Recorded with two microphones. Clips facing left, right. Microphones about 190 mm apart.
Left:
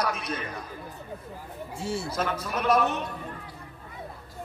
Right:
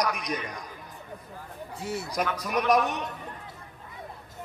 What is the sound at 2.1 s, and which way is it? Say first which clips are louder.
Speech: right 1 dB; 15° right (ahead or behind).